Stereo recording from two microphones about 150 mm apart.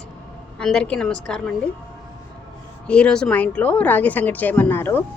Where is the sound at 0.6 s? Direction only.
5° left (ahead or behind).